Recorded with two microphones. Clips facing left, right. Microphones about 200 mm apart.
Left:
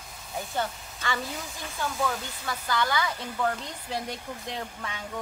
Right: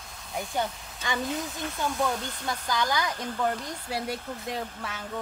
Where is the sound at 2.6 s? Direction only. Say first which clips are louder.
Left 1 dB; 15° right (ahead or behind).